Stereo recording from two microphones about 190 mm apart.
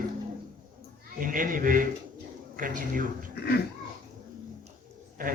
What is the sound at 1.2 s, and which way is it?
A man's voice, 45° right (ahead or behind).